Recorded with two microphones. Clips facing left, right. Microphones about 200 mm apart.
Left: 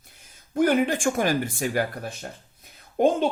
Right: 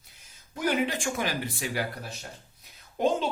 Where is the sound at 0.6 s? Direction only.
50° left (ahead or behind).